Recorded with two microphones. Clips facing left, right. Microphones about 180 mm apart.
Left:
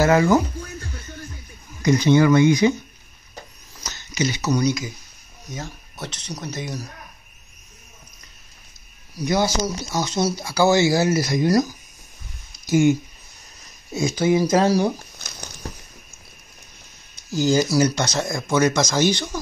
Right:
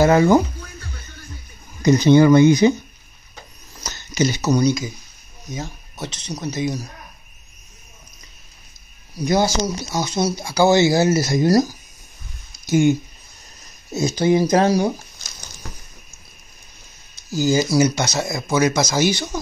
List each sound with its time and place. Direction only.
0.0 s speech: 25° right (ahead or behind)
1.8 s speech: 25° right (ahead or behind)
3.8 s a sound: 40° right (ahead or behind)
4.5 s speech: 35° right (ahead or behind)
5.5 s speech: 15° right (ahead or behind)
9.2 s speech: 40° right (ahead or behind)
9.9 s speech: 15° right (ahead or behind); by 11.7 s 35° right (ahead or behind)
12.6 s speech: 25° right (ahead or behind)
14.0 s speech: 35° right (ahead or behind)
15.1 s a sound: 60° left (ahead or behind)
17.4 s speech: 5° right (ahead or behind)